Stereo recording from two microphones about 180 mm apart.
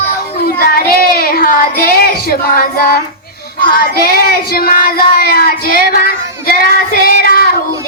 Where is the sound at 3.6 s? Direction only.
55° left (ahead or behind).